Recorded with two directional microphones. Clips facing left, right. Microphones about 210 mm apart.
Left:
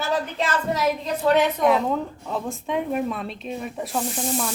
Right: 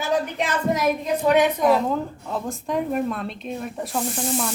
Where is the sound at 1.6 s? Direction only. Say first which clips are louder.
Right 1 dB; centre (ahead or behind).